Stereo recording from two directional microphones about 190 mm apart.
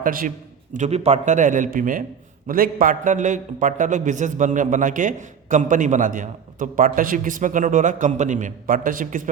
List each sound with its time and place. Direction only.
0.0 s a man's voice: 45° right (ahead or behind)